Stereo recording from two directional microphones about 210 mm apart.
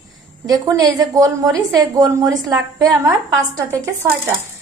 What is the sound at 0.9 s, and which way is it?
A woman's voice, 15° right (ahead or behind).